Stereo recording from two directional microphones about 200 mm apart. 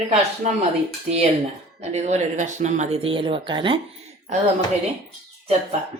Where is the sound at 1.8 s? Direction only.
35° right (ahead or behind).